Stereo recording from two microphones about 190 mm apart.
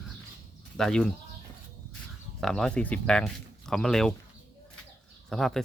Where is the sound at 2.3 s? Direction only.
Centre (ahead or behind).